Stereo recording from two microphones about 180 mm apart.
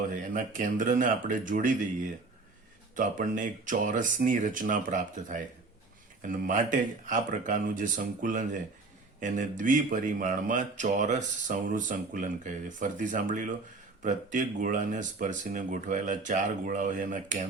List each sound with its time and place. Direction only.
0.1 s speech: 45° right (ahead or behind)
2.9 s speech: 45° right (ahead or behind)